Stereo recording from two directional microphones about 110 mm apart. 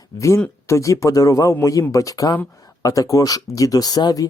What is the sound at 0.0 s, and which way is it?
A man's voice, 30° left (ahead or behind).